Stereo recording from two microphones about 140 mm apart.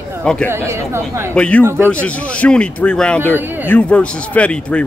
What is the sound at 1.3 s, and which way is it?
A man's voice, 10° left (ahead or behind).